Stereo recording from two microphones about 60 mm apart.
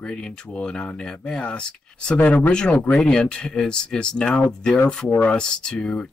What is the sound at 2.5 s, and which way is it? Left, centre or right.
Speech, centre.